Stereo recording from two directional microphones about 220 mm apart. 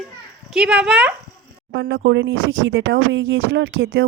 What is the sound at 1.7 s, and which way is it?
Speech, 50° right (ahead or behind).